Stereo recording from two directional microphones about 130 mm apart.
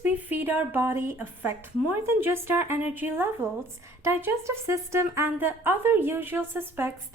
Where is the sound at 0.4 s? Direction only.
15° right (ahead or behind).